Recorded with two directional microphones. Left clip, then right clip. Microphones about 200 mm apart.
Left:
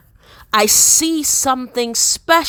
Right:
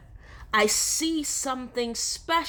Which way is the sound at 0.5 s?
35° left (ahead or behind).